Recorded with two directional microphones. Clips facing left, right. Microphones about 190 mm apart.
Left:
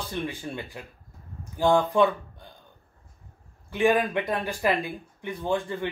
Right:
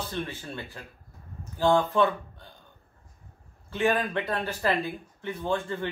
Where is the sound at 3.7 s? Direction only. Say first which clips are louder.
Left 3 dB; 15° left (ahead or behind).